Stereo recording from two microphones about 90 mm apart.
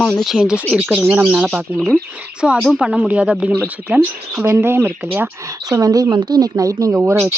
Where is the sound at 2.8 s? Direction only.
15° right (ahead or behind).